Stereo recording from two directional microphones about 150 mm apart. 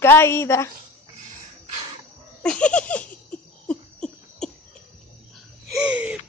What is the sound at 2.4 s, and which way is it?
Laughter, 5° left (ahead or behind).